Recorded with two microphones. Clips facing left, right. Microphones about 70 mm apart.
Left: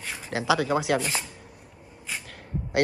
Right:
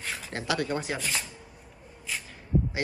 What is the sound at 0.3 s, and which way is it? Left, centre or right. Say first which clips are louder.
Speech: left 6 dB; left.